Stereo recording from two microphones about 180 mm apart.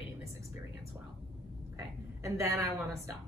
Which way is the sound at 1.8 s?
15° right (ahead or behind).